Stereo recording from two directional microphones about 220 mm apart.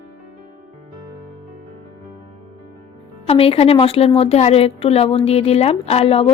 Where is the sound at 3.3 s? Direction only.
25° left (ahead or behind).